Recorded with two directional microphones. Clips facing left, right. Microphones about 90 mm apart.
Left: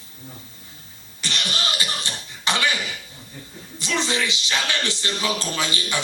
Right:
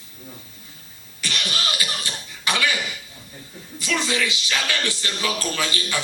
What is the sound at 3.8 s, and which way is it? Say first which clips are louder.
Speech: even; 25° left (ahead or behind).